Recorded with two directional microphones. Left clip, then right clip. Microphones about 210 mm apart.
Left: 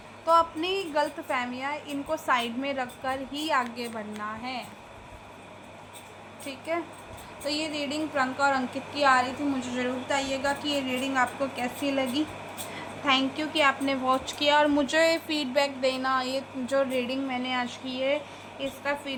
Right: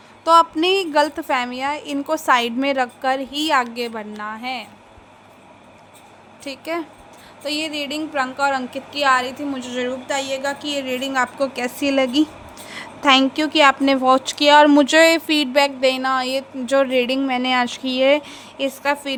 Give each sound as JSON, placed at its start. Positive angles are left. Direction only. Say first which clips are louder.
{"t": 0.3, "sound": "a woman's voice", "louder": "right 9 dB", "side_deg": -50}
{"t": 6.4, "sound": "a woman's voice", "louder": "right 5 dB", "side_deg": -50}